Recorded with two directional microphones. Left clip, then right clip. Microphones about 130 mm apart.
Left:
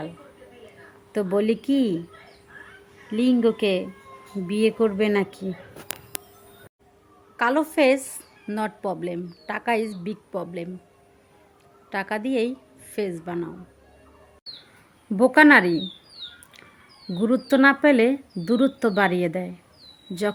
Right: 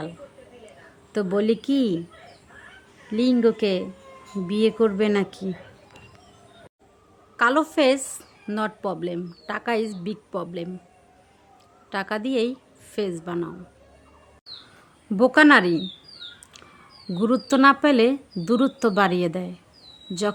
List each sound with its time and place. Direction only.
1.1 s a woman's voice: 15° right (ahead or behind)
3.1 s a woman's voice: 15° right (ahead or behind)
7.3 s a woman's voice: 15° right (ahead or behind)
11.9 s a woman's voice: 15° right (ahead or behind)
15.1 s a woman's voice: 10° right (ahead or behind)
17.2 s a woman's voice: 15° right (ahead or behind)